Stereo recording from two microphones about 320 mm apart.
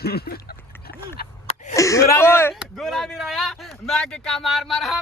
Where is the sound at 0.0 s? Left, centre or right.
Left.